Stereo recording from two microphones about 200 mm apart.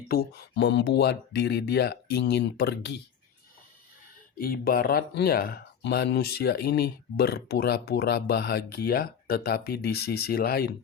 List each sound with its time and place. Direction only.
0.1 s speech: 55° left (ahead or behind)
4.4 s speech: 45° left (ahead or behind)